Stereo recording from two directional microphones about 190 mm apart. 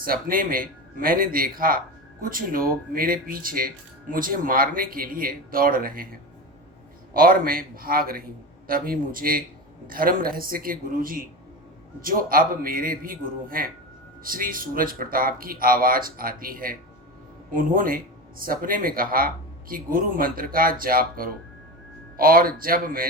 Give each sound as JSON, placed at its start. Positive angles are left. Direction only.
{"t": 0.0, "sound": "speech", "side_deg": -50}